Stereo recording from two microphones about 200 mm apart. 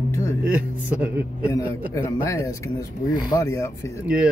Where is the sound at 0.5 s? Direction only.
10° right (ahead or behind).